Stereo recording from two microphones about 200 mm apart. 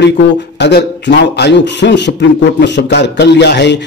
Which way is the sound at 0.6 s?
60° left (ahead or behind).